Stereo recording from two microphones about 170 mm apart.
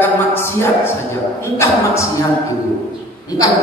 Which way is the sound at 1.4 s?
15° left (ahead or behind).